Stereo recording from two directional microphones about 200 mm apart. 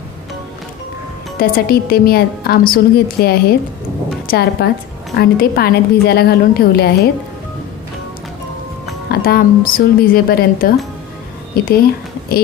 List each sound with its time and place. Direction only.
1.4 s a woman's voice: 50° left (ahead or behind)
9.1 s a woman's voice: 50° left (ahead or behind)